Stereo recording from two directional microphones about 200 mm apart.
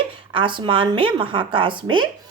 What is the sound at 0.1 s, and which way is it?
A woman's voice, 25° right (ahead or behind).